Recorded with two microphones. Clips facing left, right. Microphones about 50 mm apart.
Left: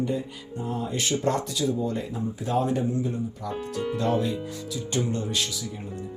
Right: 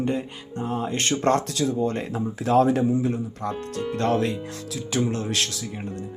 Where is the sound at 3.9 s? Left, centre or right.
Right.